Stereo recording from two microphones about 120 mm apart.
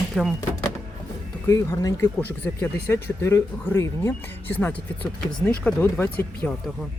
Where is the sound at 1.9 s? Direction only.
15° left (ahead or behind).